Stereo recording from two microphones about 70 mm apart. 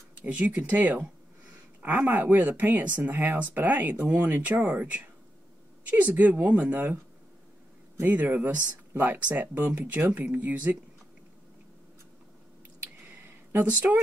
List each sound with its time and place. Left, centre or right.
0.1 s speech: right
8.0 s speech: right
12.8 s a sound: right